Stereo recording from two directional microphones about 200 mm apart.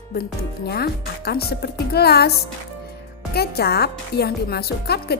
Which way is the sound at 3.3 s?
50° left (ahead or behind).